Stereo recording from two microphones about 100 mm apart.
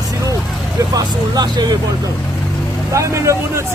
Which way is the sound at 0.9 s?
40° right (ahead or behind).